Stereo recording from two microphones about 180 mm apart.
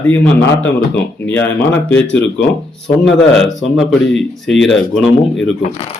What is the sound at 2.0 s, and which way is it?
Speech, 85° left.